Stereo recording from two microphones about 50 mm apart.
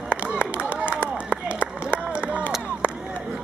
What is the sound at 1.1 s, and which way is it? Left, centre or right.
Run, right.